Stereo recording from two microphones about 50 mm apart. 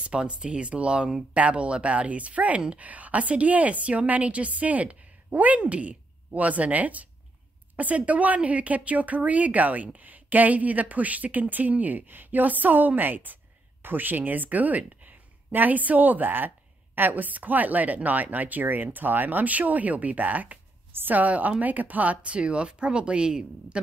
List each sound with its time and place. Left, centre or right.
0.0 s a woman's voice: centre